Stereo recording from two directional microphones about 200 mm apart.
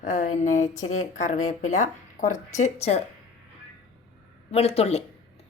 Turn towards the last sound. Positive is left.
turn(degrees=30)  # may be behind; listen again after turning